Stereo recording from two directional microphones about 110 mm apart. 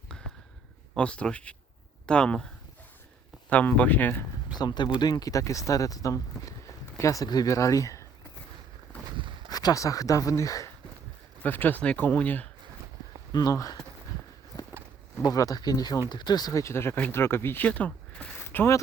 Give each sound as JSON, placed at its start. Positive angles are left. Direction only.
{"t": 0.9, "sound": "speech", "side_deg": 10}
{"t": 3.5, "sound": "speech", "side_deg": 15}
{"t": 4.5, "sound": "speech", "side_deg": 40}
{"t": 9.1, "sound": "a sound", "side_deg": -50}
{"t": 9.5, "sound": "speech", "side_deg": 35}
{"t": 11.4, "sound": "speech", "side_deg": 15}
{"t": 13.3, "sound": "speech", "side_deg": 35}
{"t": 15.2, "sound": "speech", "side_deg": 35}
{"t": 18.3, "sound": "a sound", "side_deg": 20}